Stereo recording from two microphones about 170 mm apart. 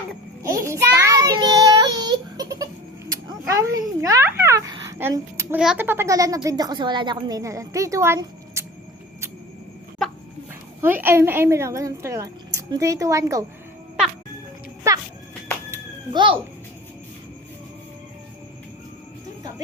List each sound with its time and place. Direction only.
0.6 s child singing: 15° right (ahead or behind)
3.2 s a sound: 20° right (ahead or behind)
5.5 s a child's voice: 10° right (ahead or behind)
10.8 s a woman's voice: 10° right (ahead or behind)
16.1 s a child's voice: 30° right (ahead or behind)